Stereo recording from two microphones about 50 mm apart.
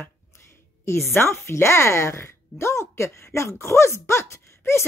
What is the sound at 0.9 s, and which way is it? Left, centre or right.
Speech, left.